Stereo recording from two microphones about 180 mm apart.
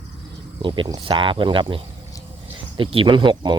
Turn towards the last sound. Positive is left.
turn(degrees=-25)  # may be behind; listen again after turning